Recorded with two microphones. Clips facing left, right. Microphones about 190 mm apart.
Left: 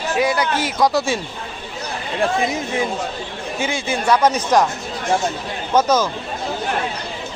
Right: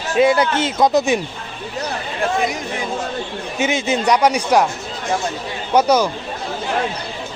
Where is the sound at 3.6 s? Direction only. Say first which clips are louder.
Right 4 dB; 20° right (ahead or behind).